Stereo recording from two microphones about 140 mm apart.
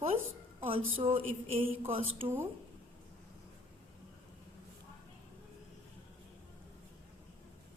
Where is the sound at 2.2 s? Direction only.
15° right (ahead or behind).